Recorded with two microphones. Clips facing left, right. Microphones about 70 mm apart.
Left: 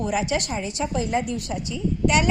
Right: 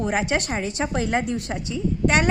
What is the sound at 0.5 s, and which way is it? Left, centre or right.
A woman's voice, right.